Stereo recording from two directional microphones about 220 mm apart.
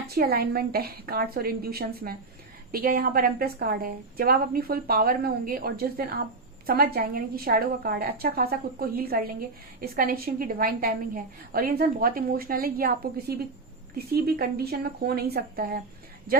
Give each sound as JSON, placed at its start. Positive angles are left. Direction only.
{"t": 0.1, "sound": "a woman's voice", "side_deg": -45}